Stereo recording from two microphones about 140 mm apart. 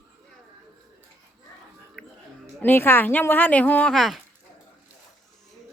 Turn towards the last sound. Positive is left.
turn(degrees=0)  # may be behind; listen again after turning